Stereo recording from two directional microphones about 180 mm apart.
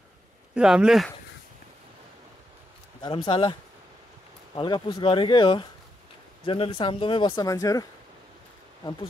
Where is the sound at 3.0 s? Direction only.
30° left (ahead or behind).